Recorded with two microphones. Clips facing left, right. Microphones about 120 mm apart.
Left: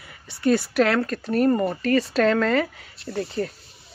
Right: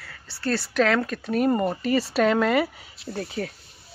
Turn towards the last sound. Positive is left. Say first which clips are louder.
# left 3 dB
turn(degrees=-5)  # may be behind; listen again after turning